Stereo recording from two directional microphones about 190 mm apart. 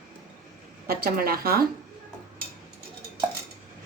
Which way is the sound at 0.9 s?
50° right (ahead or behind).